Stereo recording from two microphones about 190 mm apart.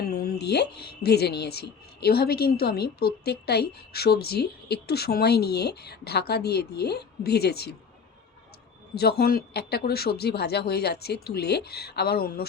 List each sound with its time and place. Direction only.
0.0 s a woman's voice: 55° left (ahead or behind)
9.0 s a woman's voice: 55° left (ahead or behind)